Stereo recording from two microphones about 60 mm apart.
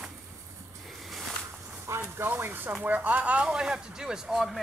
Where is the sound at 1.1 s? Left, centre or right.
Centre.